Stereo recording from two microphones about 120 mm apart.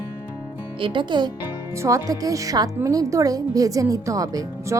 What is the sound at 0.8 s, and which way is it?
Speech, 40° right (ahead or behind).